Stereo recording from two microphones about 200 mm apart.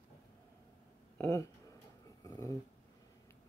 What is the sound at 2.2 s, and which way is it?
Dog, 15° left (ahead or behind).